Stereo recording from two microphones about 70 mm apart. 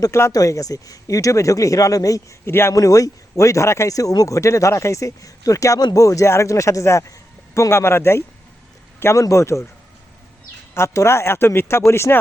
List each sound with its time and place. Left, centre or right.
0.2 s speech: left
2.5 s speech: left
2.7 s speech: left
4.4 s speech: left
10.8 s speech: left